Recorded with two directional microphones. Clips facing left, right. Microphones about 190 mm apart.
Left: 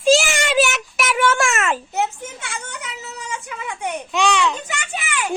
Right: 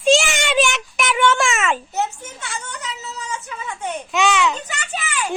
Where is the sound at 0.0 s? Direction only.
Centre (ahead or behind).